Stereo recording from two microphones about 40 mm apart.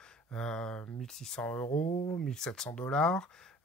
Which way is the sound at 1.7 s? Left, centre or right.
Left.